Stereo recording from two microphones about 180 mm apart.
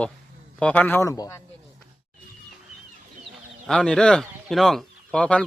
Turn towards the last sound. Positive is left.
turn(degrees=5)  # may be behind; listen again after turning